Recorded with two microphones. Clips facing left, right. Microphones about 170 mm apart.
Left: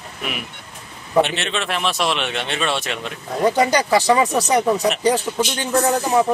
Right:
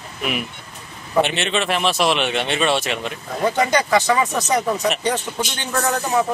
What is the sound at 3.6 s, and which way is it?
Speech, 35° left (ahead or behind).